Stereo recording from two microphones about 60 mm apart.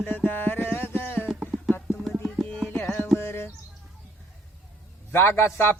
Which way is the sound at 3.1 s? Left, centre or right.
Left.